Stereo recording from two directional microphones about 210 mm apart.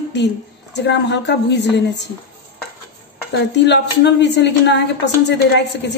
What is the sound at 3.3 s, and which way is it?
A woman's voice, 55° left (ahead or behind).